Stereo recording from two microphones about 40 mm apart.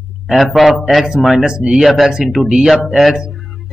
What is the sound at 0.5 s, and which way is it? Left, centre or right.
Speech, centre.